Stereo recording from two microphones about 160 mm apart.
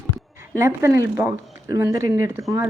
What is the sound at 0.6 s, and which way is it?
Speech, 20° right (ahead or behind).